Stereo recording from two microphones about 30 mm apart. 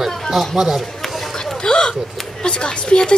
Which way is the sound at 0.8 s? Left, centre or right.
Centre.